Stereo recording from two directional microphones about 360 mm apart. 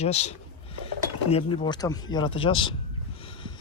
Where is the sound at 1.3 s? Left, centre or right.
Centre.